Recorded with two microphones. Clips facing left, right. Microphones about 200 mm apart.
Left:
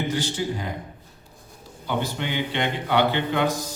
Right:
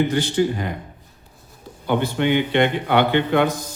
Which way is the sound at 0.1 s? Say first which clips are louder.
Right 6 dB; 60° right (ahead or behind).